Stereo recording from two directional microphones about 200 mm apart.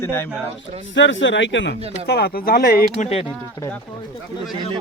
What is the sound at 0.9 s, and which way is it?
Speech, 65° left (ahead or behind).